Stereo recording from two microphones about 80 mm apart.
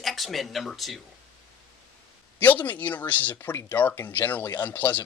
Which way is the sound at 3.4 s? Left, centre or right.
Left.